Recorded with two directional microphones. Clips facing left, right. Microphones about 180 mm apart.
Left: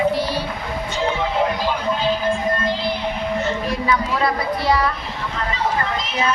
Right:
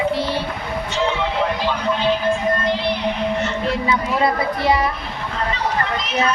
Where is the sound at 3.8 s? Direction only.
20° right (ahead or behind).